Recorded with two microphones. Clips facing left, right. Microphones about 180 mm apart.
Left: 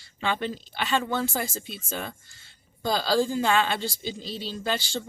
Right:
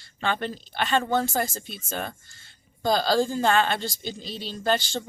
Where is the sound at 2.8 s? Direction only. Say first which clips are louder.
Right 2 dB; 50° right (ahead or behind).